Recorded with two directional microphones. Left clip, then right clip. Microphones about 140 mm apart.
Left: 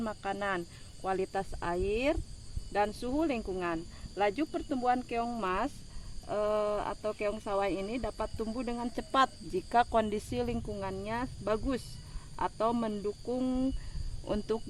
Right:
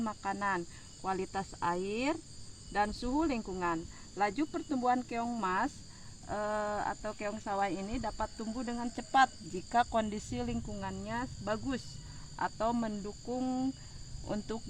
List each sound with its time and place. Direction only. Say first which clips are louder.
0.0 s speech: even; 30° left (ahead or behind)
1.0 s cricket: left 3 dB; 25° left (ahead or behind)
4.2 s speech: left 2 dB; 30° left (ahead or behind); by 14.6 s 45° left (ahead or behind)